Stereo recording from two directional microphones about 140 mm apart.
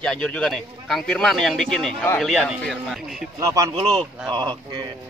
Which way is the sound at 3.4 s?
25° right (ahead or behind).